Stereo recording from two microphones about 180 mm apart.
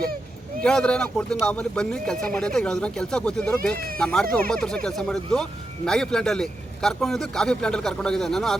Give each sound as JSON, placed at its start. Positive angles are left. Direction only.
{"t": 0.6, "sound": "speech", "side_deg": 5}